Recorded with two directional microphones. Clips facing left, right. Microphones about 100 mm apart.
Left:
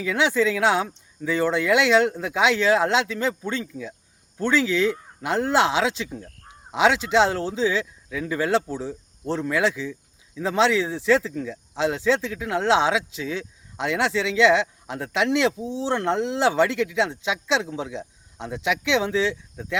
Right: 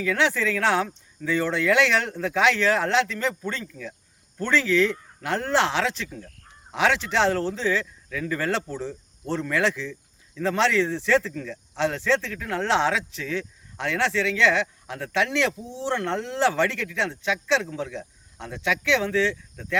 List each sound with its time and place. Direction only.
0.0 s speech: 15° left (ahead or behind)